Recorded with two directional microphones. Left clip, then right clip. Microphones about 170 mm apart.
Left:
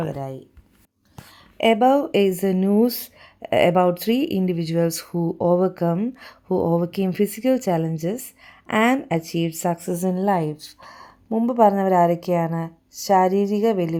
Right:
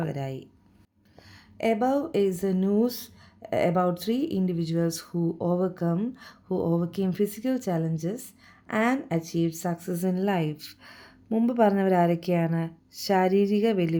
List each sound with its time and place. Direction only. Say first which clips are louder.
1.5 s a woman's voice: left 8 dB; 45° left (ahead or behind); by 14.0 s 20° left (ahead or behind)